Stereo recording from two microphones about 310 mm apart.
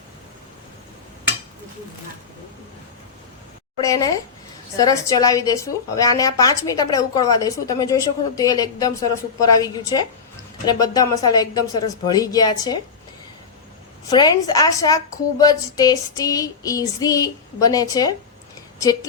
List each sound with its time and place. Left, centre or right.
3.8 s a woman's voice: centre
14.1 s a woman's voice: centre